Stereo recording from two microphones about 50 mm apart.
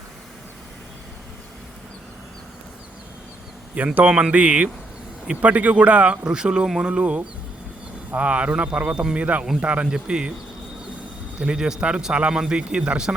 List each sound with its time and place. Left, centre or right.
3.8 s speech: right
4.1 s speech: right
9.8 s speech: centre
11.3 s speech: centre